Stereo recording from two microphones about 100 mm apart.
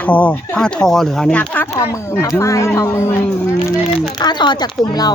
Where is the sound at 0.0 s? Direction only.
15° left (ahead or behind).